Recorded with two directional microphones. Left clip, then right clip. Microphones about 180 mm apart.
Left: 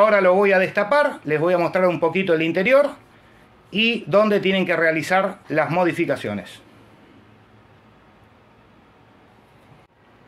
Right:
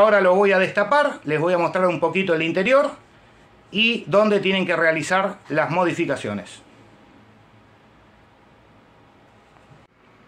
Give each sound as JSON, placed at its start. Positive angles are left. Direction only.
{"t": 0.0, "sound": "speech", "side_deg": 25}